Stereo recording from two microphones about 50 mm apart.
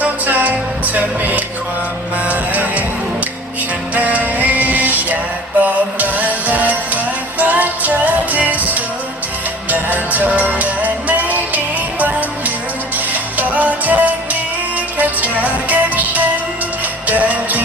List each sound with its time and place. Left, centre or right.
0.0 s music: right
3.9 s music: right
13.3 s music: right